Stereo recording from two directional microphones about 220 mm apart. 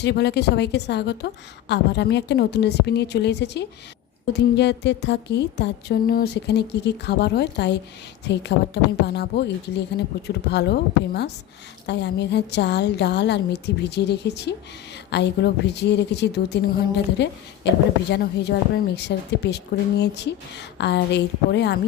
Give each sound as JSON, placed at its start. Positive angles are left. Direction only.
{"t": 0.0, "sound": "a woman's voice", "side_deg": 50}